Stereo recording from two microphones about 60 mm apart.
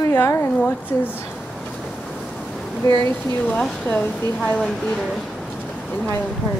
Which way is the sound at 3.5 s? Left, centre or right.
Centre.